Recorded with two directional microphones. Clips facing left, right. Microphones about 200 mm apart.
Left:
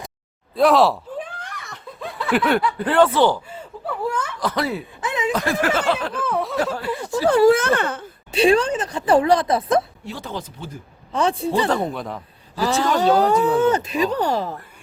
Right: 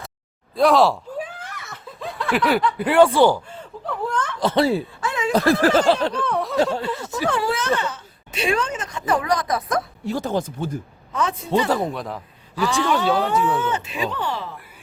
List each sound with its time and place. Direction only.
0.5 s snicker: centre (ahead or behind)
2.7 s speech: 10° right (ahead or behind)
3.8 s a sound: 10° left (ahead or behind)
4.4 s speech: 25° right (ahead or behind)
4.9 s a sound: 20° left (ahead or behind)
5.3 s a sound: 35° right (ahead or behind)
6.2 s speech: centre (ahead or behind)
7.3 s speech: 40° left (ahead or behind); by 8.0 s 55° left (ahead or behind)
8.3 s speech: 30° left (ahead or behind)
10.1 s speech: 45° right (ahead or behind)
11.1 s speech: 30° left (ahead or behind)
11.7 s speech: centre (ahead or behind)
12.5 s speech: 35° left (ahead or behind)